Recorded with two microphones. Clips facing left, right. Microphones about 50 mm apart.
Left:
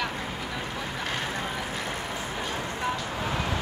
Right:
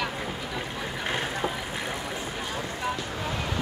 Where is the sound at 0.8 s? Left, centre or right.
Centre.